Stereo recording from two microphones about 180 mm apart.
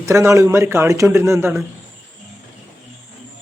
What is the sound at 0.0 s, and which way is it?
Speech, 15° right (ahead or behind).